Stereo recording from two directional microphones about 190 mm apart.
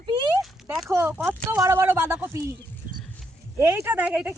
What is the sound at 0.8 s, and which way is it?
Speech, 10° right (ahead or behind).